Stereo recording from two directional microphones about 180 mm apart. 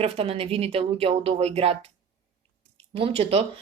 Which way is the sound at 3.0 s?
35° right (ahead or behind).